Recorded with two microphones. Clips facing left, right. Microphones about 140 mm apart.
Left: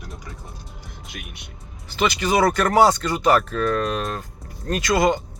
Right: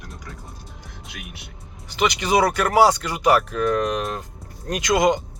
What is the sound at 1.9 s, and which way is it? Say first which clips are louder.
Speech: right 1 dB; 15° right (ahead or behind).